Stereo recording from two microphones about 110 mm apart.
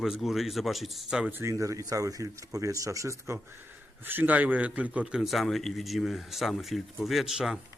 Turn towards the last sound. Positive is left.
turn(degrees=-5)  # may be behind; listen again after turning